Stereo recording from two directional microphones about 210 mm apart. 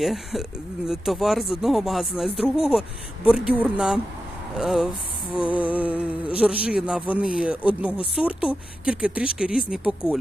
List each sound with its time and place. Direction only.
0.0 s speech: centre (ahead or behind)
5.4 s a sound: 5° right (ahead or behind)
6.8 s speech: 5° right (ahead or behind)